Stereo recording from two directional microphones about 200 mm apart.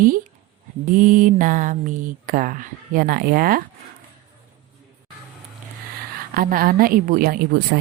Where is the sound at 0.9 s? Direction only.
40° right (ahead or behind).